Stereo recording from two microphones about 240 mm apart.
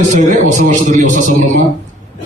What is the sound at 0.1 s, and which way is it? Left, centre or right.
A man's voice, right.